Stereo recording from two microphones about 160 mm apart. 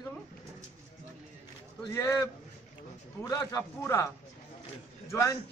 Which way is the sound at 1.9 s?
15° left (ahead or behind).